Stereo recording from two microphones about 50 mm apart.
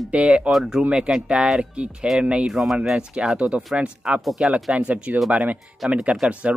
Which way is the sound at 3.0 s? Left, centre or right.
Centre.